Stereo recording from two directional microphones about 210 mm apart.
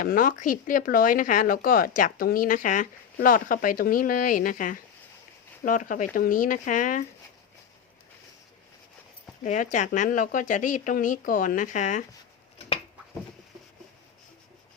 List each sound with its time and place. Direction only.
0.0 s speech: 40° left (ahead or behind)
9.4 s speech: 35° left (ahead or behind)